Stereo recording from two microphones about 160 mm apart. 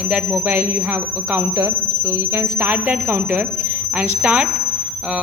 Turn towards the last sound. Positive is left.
turn(degrees=-10)  # may be behind; listen again after turning